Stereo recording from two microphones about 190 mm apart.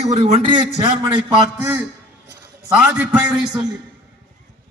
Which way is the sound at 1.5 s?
10° right (ahead or behind).